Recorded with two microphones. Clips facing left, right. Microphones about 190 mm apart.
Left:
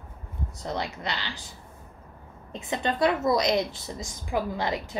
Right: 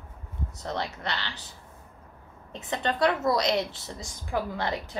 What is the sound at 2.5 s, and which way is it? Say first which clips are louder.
A woman's voice: left 1 dB; 10° left (ahead or behind).